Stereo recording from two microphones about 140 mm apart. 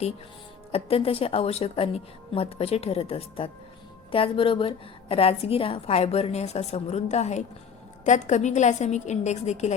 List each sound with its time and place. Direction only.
0.7 s a woman's voice: 45° left (ahead or behind)